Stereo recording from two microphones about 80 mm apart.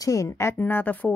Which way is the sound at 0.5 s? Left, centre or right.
Left.